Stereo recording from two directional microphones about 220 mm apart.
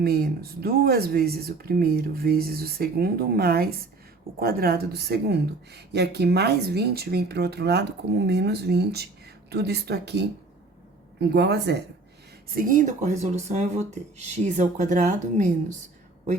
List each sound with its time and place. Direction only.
0.0 s a woman's voice: 45° right (ahead or behind)
12.5 s speech: 40° right (ahead or behind)